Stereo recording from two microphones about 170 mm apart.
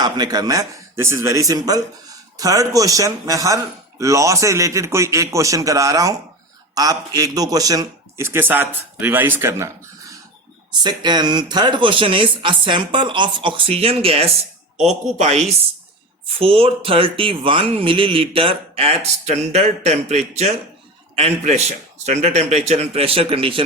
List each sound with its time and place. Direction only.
0.0 s a man's voice: 25° right (ahead or behind)